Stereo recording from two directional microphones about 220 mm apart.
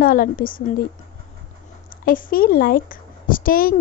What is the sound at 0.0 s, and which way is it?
Speech, 40° left (ahead or behind).